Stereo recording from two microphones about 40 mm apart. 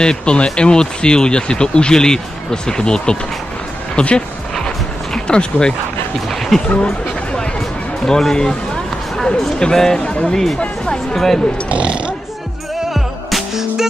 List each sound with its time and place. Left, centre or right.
0.0 s speech: left
4.6 s a sound: left
6.5 s speech: centre
8.0 s speech: centre
11.7 s speech: right
12.9 s music: centre